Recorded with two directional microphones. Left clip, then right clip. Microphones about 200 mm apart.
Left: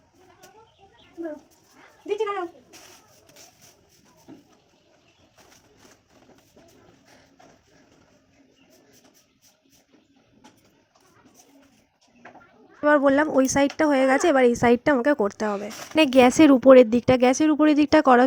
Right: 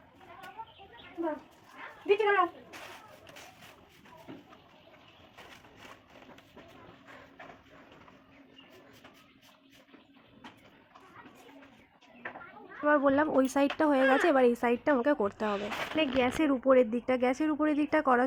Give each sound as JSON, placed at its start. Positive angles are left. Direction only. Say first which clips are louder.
{"t": 12.8, "sound": "speech", "louder": "left 7 dB", "side_deg": 40}
{"t": 16.0, "sound": "speech", "louder": "left 13 dB", "side_deg": 60}
{"t": 16.8, "sound": "speech", "louder": "left 10 dB", "side_deg": 45}